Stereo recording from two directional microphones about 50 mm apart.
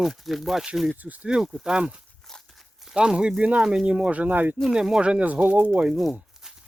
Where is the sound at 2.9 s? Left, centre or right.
Centre.